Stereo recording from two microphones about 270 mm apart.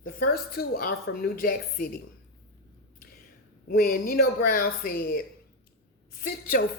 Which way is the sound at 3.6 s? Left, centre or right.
Left.